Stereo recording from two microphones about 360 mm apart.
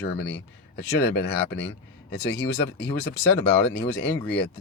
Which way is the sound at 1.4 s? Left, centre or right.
Left.